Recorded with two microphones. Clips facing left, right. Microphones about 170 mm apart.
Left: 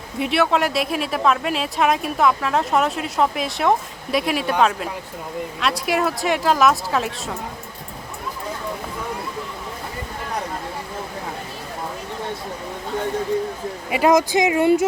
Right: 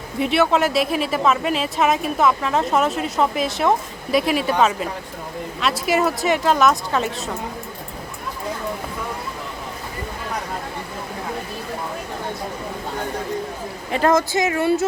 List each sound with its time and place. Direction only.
0.2 s speech: centre (ahead or behind)
13.9 s speech: 10° left (ahead or behind)